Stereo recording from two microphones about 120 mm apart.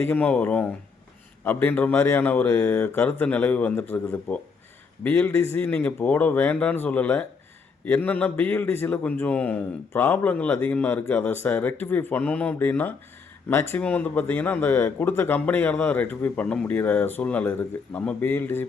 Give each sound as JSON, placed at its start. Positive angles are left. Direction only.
{"t": 0.1, "sound": "a man's voice", "side_deg": 15}